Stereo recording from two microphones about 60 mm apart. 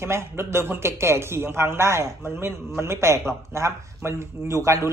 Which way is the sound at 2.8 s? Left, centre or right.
Right.